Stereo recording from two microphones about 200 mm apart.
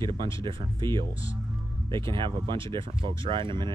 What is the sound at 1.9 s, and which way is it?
Speech, 25° right (ahead or behind).